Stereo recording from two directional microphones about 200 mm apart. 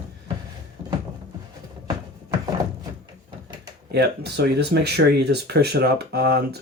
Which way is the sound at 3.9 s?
55° right (ahead or behind).